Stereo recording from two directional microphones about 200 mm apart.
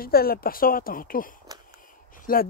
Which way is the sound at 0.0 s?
50° left (ahead or behind).